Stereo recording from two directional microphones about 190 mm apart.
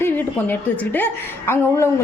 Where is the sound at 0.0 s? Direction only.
10° left (ahead or behind).